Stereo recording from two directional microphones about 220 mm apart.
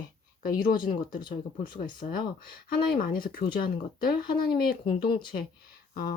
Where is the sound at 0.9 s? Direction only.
40° left (ahead or behind).